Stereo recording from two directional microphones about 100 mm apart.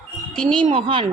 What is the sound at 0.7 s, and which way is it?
Speech, 70° right (ahead or behind).